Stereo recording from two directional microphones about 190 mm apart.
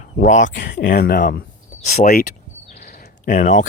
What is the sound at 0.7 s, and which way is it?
Speech, 55° left (ahead or behind).